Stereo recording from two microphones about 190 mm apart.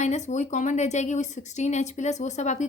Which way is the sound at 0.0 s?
40° left (ahead or behind).